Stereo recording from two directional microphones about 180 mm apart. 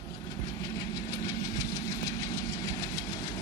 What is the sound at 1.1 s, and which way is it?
Vehicle, 20° left (ahead or behind).